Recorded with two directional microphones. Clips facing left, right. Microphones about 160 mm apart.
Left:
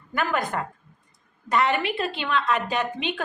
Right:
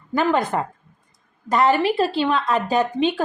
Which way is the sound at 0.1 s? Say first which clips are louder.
Right 6 dB; 30° right (ahead or behind).